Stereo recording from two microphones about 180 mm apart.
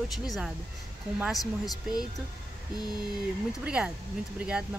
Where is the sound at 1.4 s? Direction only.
20° left (ahead or behind).